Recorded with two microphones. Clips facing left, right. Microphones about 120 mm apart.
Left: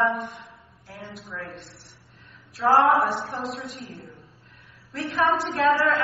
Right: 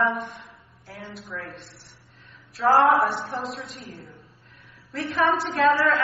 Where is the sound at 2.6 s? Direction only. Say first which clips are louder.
Even; centre (ahead or behind).